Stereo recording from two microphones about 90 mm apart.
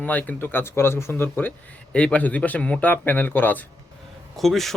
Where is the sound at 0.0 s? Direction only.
15° left (ahead or behind).